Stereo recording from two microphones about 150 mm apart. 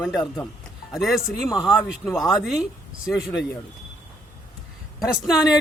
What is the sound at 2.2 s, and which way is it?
Speech, centre (ahead or behind).